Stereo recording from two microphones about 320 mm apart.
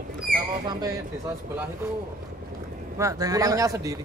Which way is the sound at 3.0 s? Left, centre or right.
Centre.